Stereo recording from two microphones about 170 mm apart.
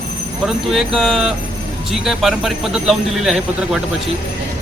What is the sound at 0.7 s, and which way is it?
Speech, centre (ahead or behind).